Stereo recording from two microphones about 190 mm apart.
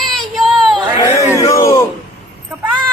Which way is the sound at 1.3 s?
15° left (ahead or behind).